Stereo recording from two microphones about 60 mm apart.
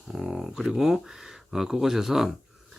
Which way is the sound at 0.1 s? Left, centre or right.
Centre.